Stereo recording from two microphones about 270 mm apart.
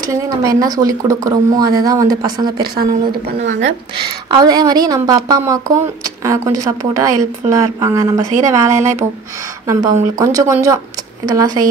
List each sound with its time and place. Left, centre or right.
0.1 s a woman's voice: centre
2.5 s a woman's voice: right
4.3 s a woman's voice: centre